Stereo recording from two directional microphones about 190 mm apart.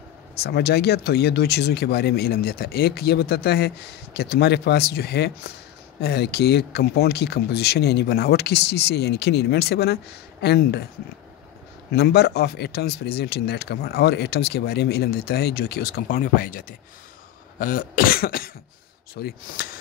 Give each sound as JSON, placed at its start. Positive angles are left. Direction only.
{"t": 0.4, "sound": "speech", "side_deg": 60}
{"t": 11.9, "sound": "speech", "side_deg": 60}
{"t": 17.6, "sound": "cough", "side_deg": 50}